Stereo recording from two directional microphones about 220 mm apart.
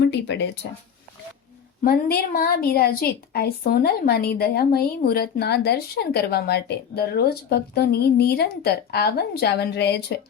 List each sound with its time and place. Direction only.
1.8 s a woman's voice: 40° left (ahead or behind)